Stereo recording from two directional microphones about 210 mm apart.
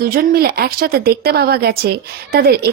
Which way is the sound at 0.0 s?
45° right (ahead or behind).